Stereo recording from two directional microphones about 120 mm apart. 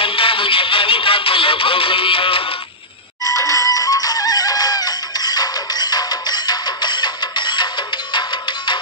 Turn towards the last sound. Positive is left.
turn(degrees=40)  # may be behind; listen again after turning